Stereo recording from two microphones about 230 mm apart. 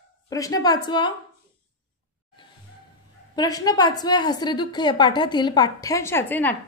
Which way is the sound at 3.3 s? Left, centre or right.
Centre.